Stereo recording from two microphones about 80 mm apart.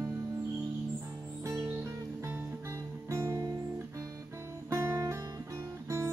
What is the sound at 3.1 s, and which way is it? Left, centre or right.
Music, right.